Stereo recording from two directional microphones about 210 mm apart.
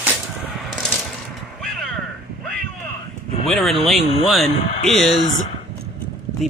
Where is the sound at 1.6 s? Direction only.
Centre (ahead or behind).